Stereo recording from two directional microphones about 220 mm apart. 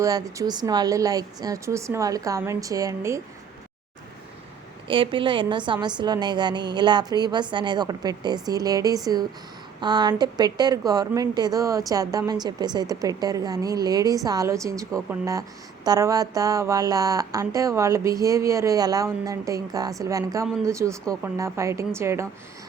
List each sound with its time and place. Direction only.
0.0 s a woman's voice: 15° right (ahead or behind)
4.9 s a woman's voice: 25° right (ahead or behind)